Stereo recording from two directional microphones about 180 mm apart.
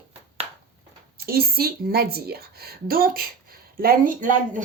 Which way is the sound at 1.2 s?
55° right (ahead or behind).